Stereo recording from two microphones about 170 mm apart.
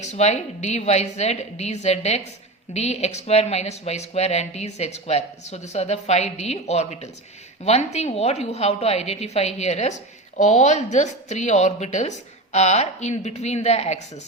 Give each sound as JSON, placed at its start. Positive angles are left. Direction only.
{"t": 0.0, "sound": "a woman's voice", "side_deg": 40}